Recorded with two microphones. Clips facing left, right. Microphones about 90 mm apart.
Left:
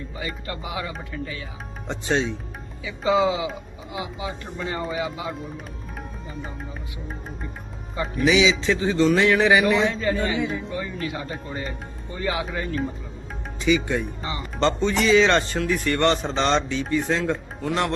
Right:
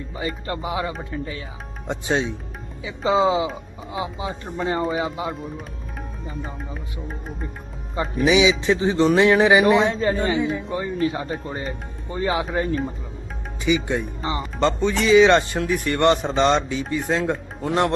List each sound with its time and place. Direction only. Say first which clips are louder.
0.2 s speech: right 5 dB; 30° right (ahead or behind)
1.9 s speech: right 1 dB; 10° right (ahead or behind)
2.8 s speech: right 1 dB; 30° right (ahead or behind)
8.2 s speech: right 2 dB; 20° right (ahead or behind)
9.9 s speech: right 3 dB; 35° right (ahead or behind)
13.7 s speech: even; 20° right (ahead or behind)
14.6 s speech: even; 5° right (ahead or behind)